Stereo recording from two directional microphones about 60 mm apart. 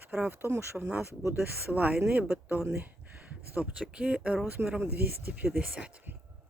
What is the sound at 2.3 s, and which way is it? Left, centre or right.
Speech, right.